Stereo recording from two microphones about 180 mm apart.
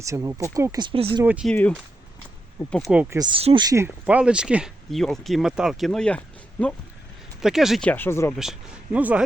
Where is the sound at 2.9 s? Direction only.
10° right (ahead or behind).